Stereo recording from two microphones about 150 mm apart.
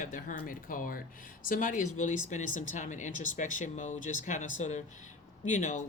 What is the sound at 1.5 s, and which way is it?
Speech, 60° left (ahead or behind).